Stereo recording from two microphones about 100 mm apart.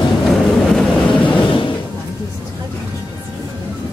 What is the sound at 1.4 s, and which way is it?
Slam, 55° left (ahead or behind).